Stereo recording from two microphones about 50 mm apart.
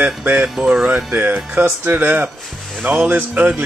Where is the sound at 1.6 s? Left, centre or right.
Right.